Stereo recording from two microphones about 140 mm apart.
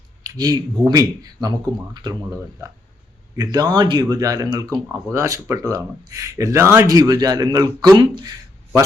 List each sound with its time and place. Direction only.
0.2 s speech: 25° right (ahead or behind)
2.3 s speech: 20° right (ahead or behind)